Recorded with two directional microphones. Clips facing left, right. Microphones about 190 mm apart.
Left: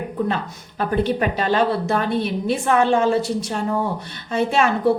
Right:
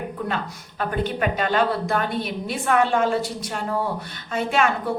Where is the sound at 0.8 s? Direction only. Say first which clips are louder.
Left 4 dB; 35° left (ahead or behind).